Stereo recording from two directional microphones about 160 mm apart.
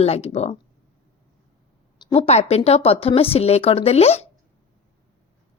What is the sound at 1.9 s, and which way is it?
Speech, 40° left (ahead or behind).